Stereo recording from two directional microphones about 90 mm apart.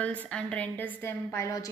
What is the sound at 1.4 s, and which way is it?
Speech, 40° left (ahead or behind).